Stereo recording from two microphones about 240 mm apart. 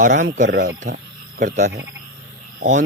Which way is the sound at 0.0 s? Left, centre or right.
Right.